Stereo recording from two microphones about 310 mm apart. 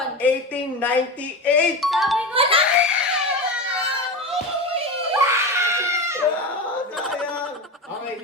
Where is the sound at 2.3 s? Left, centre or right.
Centre.